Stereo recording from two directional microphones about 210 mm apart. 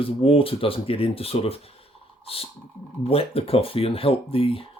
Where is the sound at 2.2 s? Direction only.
25° left (ahead or behind).